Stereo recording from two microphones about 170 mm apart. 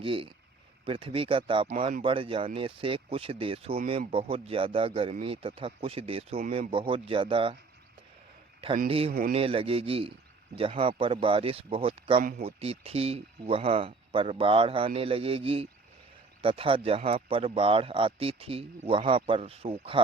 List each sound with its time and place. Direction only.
0.0 s speech: 30° right (ahead or behind)
8.9 s speech: 35° right (ahead or behind)